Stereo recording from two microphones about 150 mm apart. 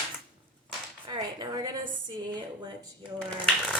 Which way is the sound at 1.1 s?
30° right (ahead or behind).